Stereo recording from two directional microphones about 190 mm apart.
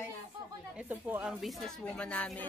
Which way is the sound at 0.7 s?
10° right (ahead or behind).